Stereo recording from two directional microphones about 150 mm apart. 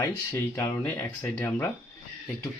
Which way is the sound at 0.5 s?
15° left (ahead or behind).